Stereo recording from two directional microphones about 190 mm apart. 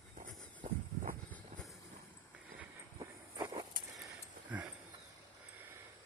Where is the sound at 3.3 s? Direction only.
20° right (ahead or behind).